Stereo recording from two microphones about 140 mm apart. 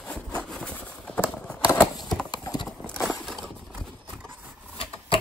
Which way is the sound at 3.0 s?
Centre (ahead or behind).